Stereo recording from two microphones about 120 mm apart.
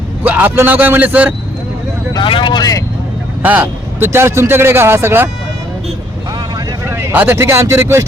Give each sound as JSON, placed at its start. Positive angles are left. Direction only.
{"t": 0.3, "sound": "a man's voice", "side_deg": -15}
{"t": 2.1, "sound": "speech", "side_deg": 45}
{"t": 3.4, "sound": "a man's voice", "side_deg": -15}
{"t": 6.8, "sound": "speech", "side_deg": -20}